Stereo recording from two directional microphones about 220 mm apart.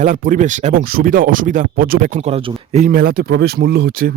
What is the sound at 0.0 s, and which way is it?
Speech, 35° right (ahead or behind).